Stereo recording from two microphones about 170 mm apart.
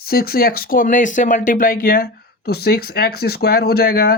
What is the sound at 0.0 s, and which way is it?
Speech, 60° left (ahead or behind).